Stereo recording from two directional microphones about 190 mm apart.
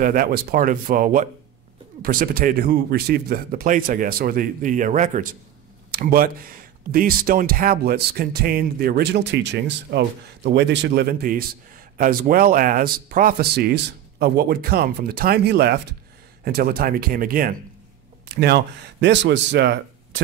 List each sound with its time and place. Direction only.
0.0 s speech: 50° right (ahead or behind)
18.3 s speech: 60° right (ahead or behind)